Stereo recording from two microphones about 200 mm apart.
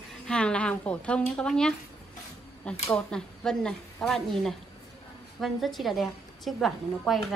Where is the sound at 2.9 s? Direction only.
5° left (ahead or behind).